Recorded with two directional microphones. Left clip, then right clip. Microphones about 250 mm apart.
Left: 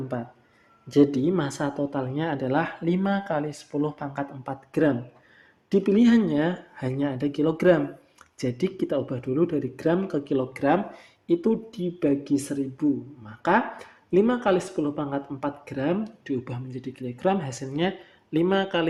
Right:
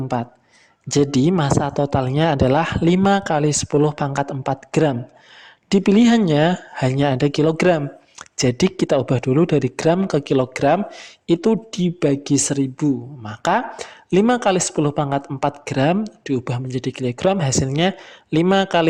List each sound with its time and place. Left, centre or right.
0.9 s speech: right